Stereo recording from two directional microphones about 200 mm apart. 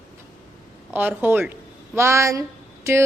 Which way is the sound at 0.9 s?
10° right (ahead or behind).